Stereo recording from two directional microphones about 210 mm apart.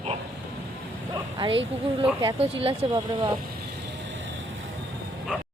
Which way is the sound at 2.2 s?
25° right (ahead or behind).